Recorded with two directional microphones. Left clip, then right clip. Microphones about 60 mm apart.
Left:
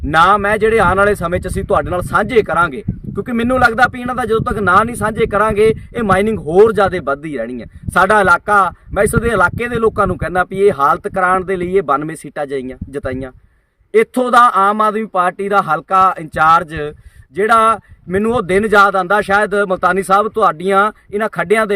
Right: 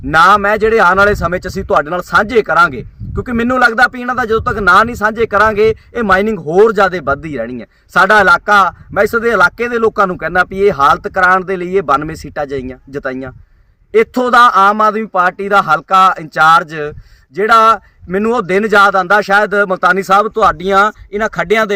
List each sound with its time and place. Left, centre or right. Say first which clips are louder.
0.1 s a man's voice: right 3 dB; centre